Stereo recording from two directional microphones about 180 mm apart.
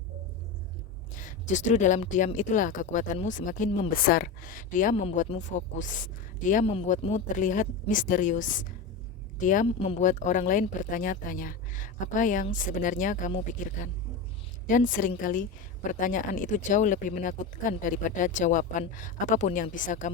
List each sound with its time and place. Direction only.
1.1 s a woman's voice: 45° left (ahead or behind)